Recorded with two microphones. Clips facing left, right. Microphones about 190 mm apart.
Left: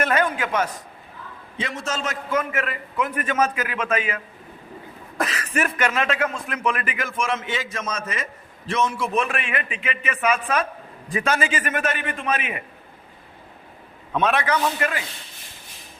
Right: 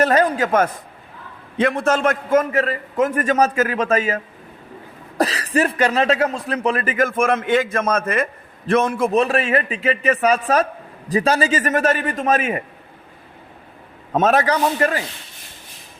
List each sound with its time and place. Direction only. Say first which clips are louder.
0.0 s a man's voice: right 6 dB; 40° right (ahead or behind)
14.1 s speech: right 5 dB; 40° right (ahead or behind)